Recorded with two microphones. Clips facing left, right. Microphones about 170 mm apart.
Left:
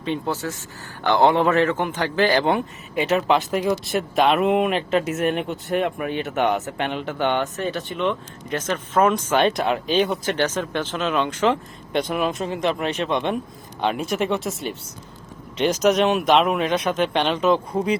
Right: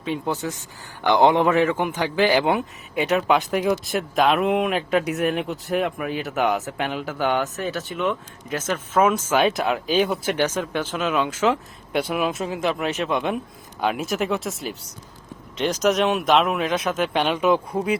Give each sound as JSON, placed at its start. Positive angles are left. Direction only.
{"t": 0.3, "sound": "a man's voice", "side_deg": -20}